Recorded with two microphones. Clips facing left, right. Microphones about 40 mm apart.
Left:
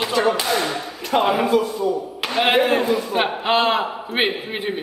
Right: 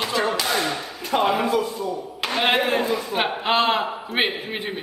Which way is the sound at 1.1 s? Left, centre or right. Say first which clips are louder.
Left 3 dB; centre.